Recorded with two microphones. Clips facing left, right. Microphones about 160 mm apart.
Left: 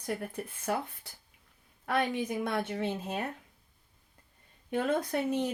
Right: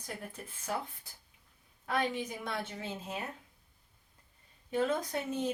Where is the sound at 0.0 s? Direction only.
55° left (ahead or behind).